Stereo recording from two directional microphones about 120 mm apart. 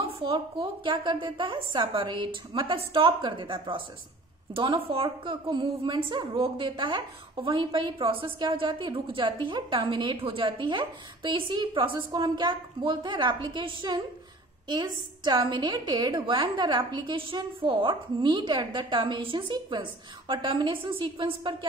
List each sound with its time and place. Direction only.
0.0 s a woman's voice: 45° right (ahead or behind)